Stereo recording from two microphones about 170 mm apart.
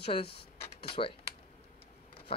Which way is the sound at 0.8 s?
30° left (ahead or behind).